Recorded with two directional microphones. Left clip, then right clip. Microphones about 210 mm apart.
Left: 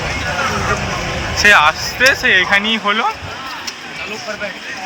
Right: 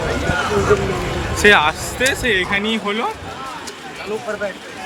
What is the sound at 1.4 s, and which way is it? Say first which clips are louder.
Speech: left 3 dB; 15° right (ahead or behind).